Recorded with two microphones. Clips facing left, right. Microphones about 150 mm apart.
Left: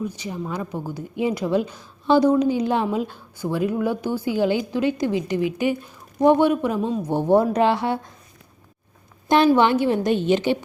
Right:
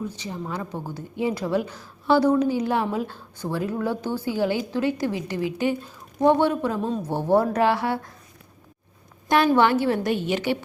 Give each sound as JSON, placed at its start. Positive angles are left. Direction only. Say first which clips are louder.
{"t": 0.0, "sound": "a woman's voice", "louder": "left 3 dB", "side_deg": 15}
{"t": 9.6, "sound": "a woman's voice", "louder": "left 2 dB", "side_deg": 20}